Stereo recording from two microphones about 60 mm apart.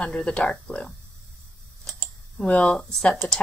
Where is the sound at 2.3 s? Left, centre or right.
Centre.